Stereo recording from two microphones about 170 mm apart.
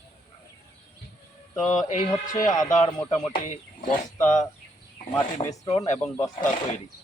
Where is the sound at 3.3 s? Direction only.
55° left (ahead or behind).